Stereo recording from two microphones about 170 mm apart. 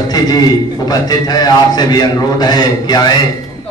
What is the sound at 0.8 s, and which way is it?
A man's voice, 25° left (ahead or behind).